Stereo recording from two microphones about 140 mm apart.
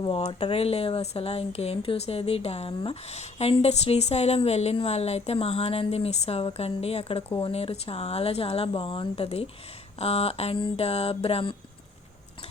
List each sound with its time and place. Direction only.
0.0 s speech: 40° left (ahead or behind)